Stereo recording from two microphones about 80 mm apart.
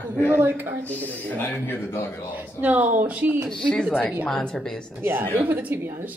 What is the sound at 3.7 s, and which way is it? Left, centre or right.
Speech, centre.